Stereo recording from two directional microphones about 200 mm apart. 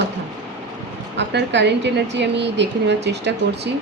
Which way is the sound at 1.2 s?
60° right (ahead or behind).